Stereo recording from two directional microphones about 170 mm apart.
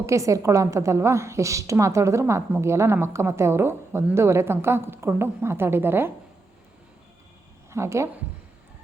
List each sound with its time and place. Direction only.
0.0 s a woman's voice: 15° right (ahead or behind)
7.7 s a woman's voice: 15° right (ahead or behind)